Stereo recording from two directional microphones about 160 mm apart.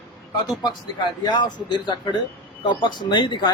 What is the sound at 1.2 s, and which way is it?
Speech, 30° left (ahead or behind).